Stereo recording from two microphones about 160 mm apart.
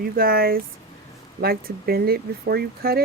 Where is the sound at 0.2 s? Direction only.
70° right (ahead or behind).